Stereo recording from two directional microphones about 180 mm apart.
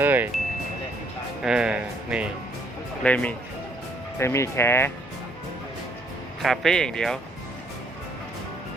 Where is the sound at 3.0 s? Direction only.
5° left (ahead or behind).